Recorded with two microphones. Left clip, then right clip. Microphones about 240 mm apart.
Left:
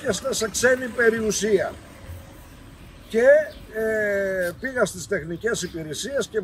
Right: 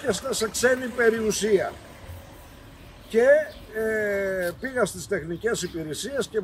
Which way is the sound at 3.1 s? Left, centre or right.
Centre.